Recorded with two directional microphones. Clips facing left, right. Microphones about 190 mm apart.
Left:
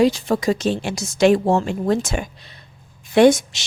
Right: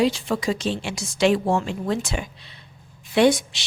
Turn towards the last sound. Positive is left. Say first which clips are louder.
# left 5 dB
turn(degrees=45)  # may be behind; listen again after turning